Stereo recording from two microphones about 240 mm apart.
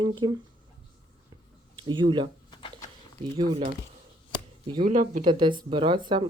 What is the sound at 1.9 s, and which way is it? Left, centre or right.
Speech, centre.